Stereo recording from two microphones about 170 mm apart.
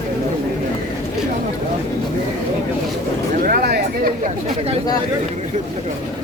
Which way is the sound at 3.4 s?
65° right (ahead or behind).